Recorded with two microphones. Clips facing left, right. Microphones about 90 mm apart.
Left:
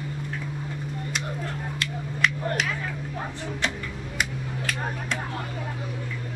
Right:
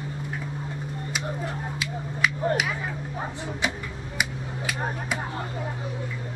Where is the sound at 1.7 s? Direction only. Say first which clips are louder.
Even; 5° right (ahead or behind).